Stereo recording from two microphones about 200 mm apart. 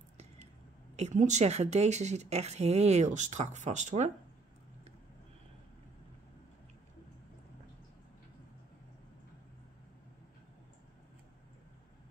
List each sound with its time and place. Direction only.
0.9 s speech: 35° right (ahead or behind)